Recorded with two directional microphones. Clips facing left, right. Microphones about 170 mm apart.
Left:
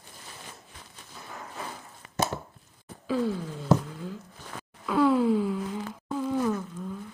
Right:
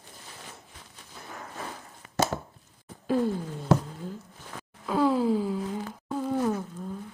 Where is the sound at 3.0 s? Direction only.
50° right (ahead or behind).